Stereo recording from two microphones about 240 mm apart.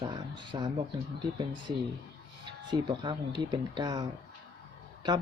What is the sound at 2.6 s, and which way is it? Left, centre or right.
Speech, centre.